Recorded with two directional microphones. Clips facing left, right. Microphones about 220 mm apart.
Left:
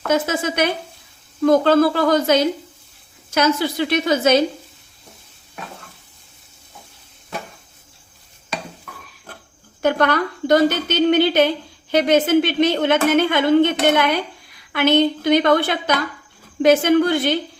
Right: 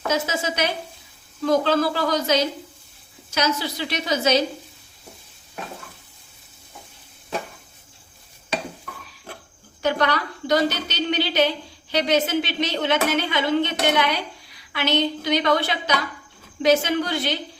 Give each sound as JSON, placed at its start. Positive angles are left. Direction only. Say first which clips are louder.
{"t": 0.1, "sound": "a woman's voice", "louder": "left 6 dB", "side_deg": 55}
{"t": 9.8, "sound": "a woman's voice", "louder": "left 4 dB", "side_deg": 50}